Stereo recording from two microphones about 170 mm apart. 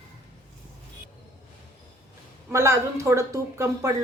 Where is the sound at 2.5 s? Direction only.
15° right (ahead or behind).